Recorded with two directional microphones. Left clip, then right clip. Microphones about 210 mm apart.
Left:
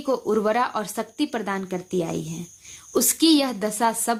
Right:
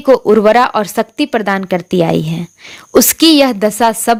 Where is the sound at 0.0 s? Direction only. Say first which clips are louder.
Right 14 dB; 40° right (ahead or behind).